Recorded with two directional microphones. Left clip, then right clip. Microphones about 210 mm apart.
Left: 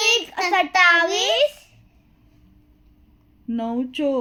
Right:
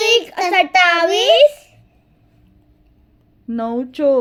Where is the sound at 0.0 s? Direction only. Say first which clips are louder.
Right 5 dB; 25° right (ahead or behind).